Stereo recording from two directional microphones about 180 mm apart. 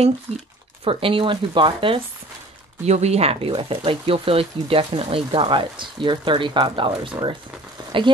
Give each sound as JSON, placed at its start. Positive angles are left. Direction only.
{"t": 0.8, "sound": "speech", "side_deg": -30}